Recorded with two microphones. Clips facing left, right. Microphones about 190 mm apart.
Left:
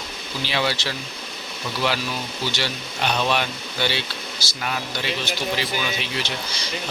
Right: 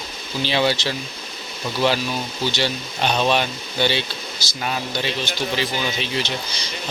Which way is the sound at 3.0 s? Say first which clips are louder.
Right 3 dB; 25° right (ahead or behind).